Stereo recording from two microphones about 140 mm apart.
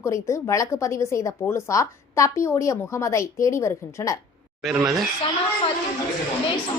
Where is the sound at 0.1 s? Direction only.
20° left (ahead or behind).